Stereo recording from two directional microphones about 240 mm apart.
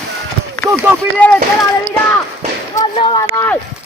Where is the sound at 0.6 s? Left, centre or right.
Centre.